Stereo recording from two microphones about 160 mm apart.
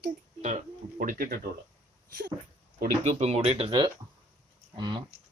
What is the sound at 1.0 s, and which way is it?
Speech, 60° right (ahead or behind).